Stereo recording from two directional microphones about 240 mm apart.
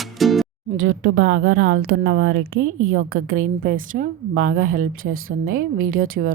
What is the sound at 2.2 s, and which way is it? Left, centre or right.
Speech, right.